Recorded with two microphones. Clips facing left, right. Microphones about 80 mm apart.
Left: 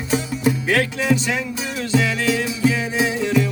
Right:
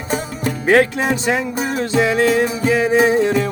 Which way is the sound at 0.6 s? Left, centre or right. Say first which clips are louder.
Right 10 dB; right.